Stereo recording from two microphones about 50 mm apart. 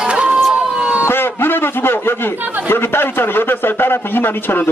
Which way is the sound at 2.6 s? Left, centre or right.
Left.